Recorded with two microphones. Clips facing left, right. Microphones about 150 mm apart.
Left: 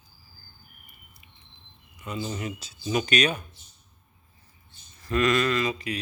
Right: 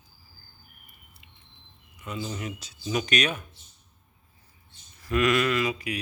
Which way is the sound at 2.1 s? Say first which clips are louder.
Left 2 dB; centre (ahead or behind).